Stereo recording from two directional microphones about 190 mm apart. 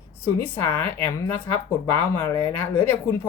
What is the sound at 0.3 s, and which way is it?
Speech, 10° left (ahead or behind).